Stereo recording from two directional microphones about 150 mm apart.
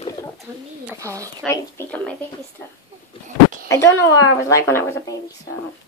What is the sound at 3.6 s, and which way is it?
A woman's voice, 20° left (ahead or behind).